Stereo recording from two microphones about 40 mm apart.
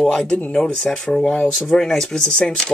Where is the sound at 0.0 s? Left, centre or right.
Centre.